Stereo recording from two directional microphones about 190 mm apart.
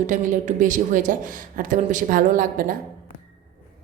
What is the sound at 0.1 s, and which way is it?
A woman's voice, 40° right (ahead or behind).